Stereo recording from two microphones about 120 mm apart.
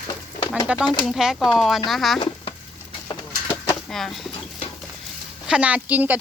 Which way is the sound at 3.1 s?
40° left (ahead or behind).